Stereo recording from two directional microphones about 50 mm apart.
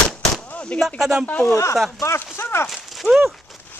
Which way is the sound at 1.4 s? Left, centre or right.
Left.